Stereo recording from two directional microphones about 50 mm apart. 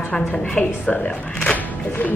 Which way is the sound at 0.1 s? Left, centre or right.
Centre.